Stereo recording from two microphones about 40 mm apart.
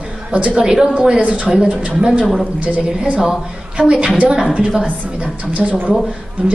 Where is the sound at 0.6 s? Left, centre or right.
Centre.